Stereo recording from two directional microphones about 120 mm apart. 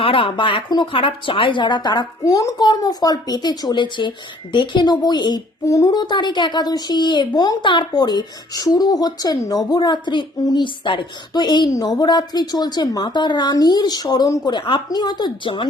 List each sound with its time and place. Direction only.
0.0 s speech: 45° left (ahead or behind)